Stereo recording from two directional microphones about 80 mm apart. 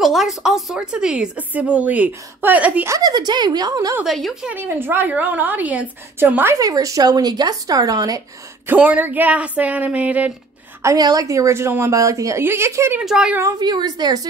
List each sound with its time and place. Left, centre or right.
0.0 s speech: centre
3.0 s speech: right
4.0 s a woman's voice: centre
4.5 s speech: right
6.6 s speech: right
8.6 s speech: centre
11.0 s a woman's voice: right
13.0 s a woman's voice: centre
13.6 s speech: right